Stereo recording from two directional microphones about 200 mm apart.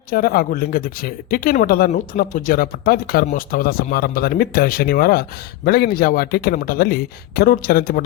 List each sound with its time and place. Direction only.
0.1 s speech: 50° left (ahead or behind)